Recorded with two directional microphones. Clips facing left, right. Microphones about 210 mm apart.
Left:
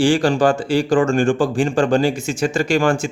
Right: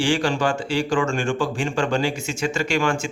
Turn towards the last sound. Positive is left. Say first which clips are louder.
# left 5 dB
turn(degrees=35)  # may be behind; listen again after turning